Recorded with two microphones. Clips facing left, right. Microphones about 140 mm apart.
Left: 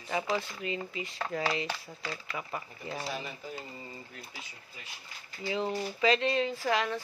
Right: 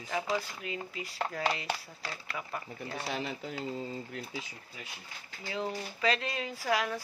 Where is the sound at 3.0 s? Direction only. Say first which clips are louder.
Right 4 dB; 75° right (ahead or behind).